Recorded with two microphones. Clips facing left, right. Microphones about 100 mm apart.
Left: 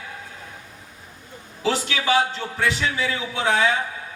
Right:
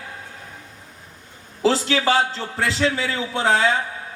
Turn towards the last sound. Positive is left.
turn(degrees=-30)  # may be behind; listen again after turning